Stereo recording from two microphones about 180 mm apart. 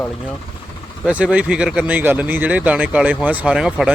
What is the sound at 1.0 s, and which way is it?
Speech, 5° right (ahead or behind).